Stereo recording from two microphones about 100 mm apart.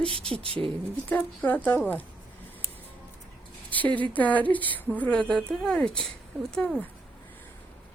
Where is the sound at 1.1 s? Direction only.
20° left (ahead or behind).